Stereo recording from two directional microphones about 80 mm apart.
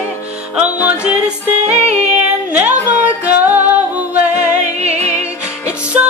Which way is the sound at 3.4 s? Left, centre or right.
Right.